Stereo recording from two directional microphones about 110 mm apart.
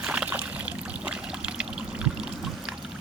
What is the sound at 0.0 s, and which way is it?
Trickle, 10° right (ahead or behind).